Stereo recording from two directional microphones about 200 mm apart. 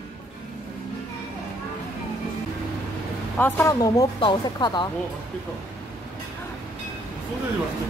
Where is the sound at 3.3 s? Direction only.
10° left (ahead or behind).